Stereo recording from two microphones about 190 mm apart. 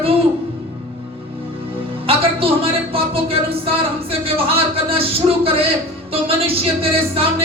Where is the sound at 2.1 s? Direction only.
30° right (ahead or behind).